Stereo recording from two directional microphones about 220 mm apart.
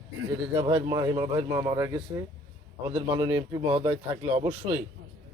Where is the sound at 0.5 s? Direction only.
25° right (ahead or behind).